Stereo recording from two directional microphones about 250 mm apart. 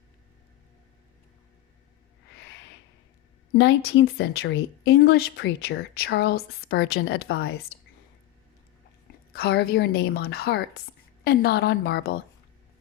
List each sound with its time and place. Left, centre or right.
3.5 s speech: left
9.3 s speech: left